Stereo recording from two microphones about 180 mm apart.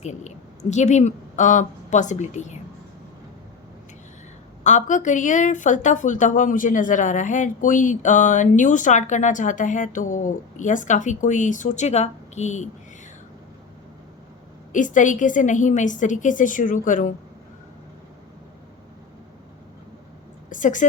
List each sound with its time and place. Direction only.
0.0 s a woman's voice: 40° left (ahead or behind)
4.6 s a woman's voice: 40° left (ahead or behind)
14.7 s a woman's voice: 45° left (ahead or behind)
20.5 s a sound: 45° left (ahead or behind)